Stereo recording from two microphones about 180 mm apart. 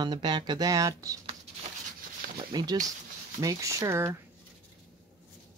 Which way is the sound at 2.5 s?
20° right (ahead or behind).